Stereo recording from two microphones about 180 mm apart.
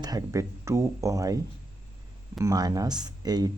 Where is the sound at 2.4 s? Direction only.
20° right (ahead or behind).